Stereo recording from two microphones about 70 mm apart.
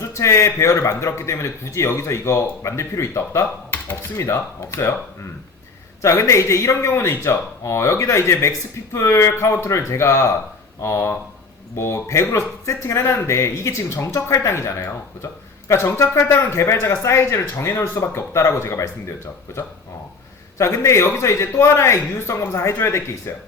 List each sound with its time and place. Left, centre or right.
0.0 s speech: left